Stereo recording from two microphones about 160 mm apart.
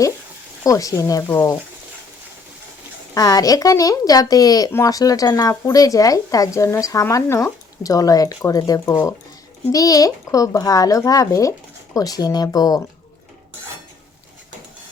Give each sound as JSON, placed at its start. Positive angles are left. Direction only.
{"t": 0.6, "sound": "speech", "side_deg": 20}
{"t": 3.2, "sound": "speech", "side_deg": 25}